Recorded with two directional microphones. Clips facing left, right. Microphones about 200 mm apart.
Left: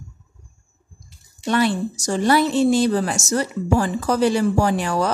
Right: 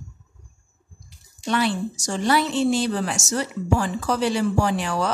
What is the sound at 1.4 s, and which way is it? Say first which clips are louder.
A woman's voice: left 3 dB; 45° left (ahead or behind).